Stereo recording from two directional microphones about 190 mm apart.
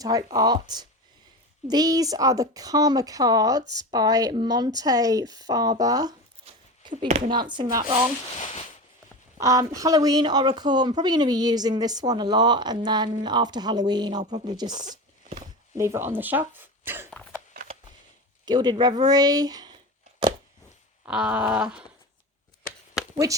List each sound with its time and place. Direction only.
0.0 s speech: 20° right (ahead or behind)
9.4 s speech: 15° right (ahead or behind)
14.8 s a sound: 40° right (ahead or behind)
15.8 s speech: 15° right (ahead or behind)
18.4 s speech: 20° right (ahead or behind)
21.0 s a sound: 5° right (ahead or behind)